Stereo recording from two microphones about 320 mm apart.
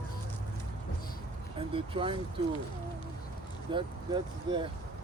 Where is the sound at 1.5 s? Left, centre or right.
Centre.